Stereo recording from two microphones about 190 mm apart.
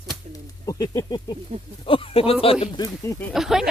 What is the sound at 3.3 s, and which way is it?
Speech, centre (ahead or behind).